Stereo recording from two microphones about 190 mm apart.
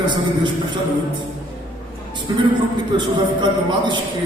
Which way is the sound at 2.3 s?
25° right (ahead or behind).